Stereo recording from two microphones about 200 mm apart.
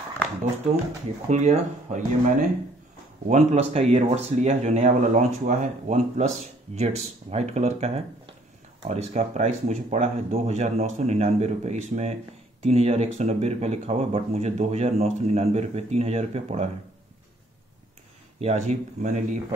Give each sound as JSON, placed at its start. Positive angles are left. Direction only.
{"t": 1.3, "sound": "speech", "side_deg": -35}
{"t": 18.4, "sound": "speech", "side_deg": -35}